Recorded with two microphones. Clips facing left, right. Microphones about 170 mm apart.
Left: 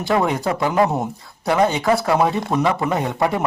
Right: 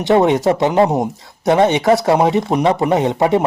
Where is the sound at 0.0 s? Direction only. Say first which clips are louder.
Right 7 dB; 20° right (ahead or behind).